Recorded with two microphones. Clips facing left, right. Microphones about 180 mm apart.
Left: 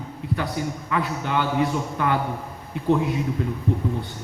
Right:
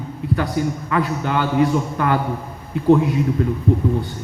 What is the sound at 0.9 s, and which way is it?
A man's voice, 55° right (ahead or behind).